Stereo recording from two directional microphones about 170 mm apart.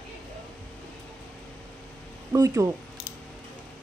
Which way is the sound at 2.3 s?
20° right (ahead or behind).